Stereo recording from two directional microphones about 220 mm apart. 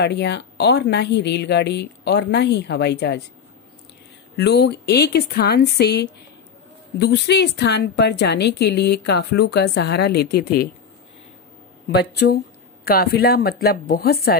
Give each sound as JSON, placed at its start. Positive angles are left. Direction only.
{"t": 0.0, "sound": "a woman's voice", "side_deg": 50}
{"t": 4.4, "sound": "a woman's voice", "side_deg": 50}
{"t": 11.9, "sound": "a woman's voice", "side_deg": 45}